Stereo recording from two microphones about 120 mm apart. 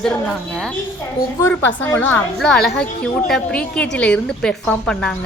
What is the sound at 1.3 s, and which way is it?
Speech, 25° left (ahead or behind).